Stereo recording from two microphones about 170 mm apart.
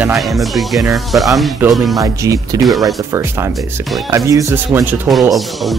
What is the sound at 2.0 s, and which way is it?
Speech, 20° right (ahead or behind).